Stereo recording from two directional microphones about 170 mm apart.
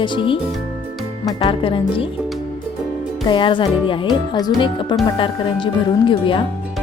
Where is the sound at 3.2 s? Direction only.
30° left (ahead or behind).